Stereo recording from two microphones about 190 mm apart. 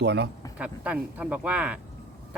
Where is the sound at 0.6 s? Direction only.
5° right (ahead or behind).